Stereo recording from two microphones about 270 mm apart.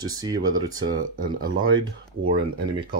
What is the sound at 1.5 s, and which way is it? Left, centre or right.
Speech, right.